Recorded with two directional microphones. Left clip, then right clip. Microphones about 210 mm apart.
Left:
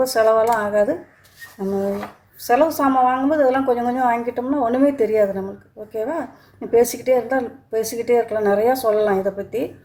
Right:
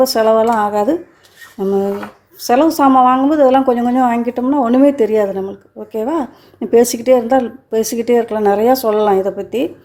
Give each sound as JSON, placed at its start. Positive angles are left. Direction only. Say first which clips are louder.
{"t": 0.0, "sound": "a woman's voice", "louder": "right 4 dB", "side_deg": -40}
{"t": 2.5, "sound": "a woman's voice", "louder": "right 6 dB", "side_deg": -40}